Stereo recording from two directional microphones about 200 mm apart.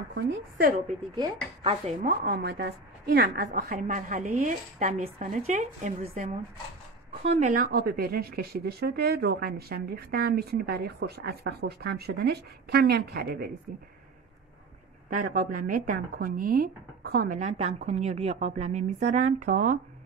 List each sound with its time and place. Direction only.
0.1 s speech: 50° right (ahead or behind)
1.1 s speech: 25° right (ahead or behind)
2.0 s speech: 45° right (ahead or behind)
15.0 s speech: 40° right (ahead or behind)